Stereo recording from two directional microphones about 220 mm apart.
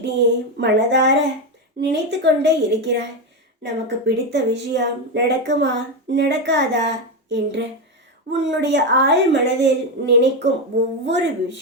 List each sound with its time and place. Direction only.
0.6 s speech: 55° right (ahead or behind)